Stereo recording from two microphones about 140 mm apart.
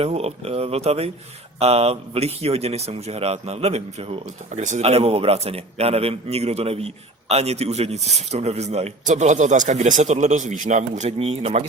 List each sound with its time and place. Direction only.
0.0 s a man's voice: 50° right (ahead or behind)